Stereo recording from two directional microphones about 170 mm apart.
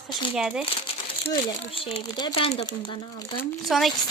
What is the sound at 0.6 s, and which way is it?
Speech, 30° left (ahead or behind).